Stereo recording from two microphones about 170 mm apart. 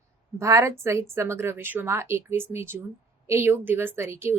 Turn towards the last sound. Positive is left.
turn(degrees=-15)  # may be behind; listen again after turning